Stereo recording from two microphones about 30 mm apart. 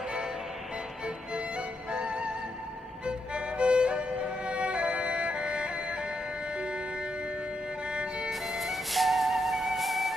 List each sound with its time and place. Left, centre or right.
1.9 s music: right
7.9 s violin: right
8.3 s music: centre